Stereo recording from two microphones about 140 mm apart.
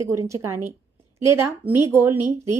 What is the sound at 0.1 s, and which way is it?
A woman's voice, 20° right (ahead or behind).